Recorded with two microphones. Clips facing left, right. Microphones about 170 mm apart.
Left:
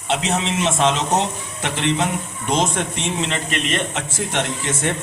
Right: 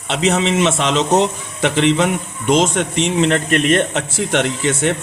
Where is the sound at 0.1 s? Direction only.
90° right.